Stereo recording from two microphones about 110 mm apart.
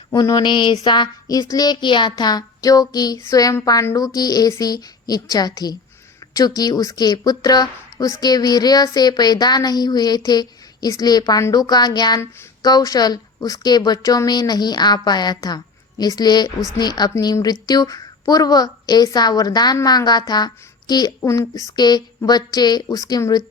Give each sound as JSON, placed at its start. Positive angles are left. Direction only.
{"t": 0.1, "sound": "speech", "side_deg": 35}